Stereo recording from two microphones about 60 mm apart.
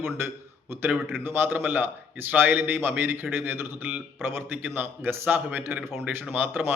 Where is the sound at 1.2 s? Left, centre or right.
Right.